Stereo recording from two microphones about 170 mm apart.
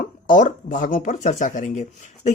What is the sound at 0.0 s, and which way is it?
Speech, 50° left (ahead or behind).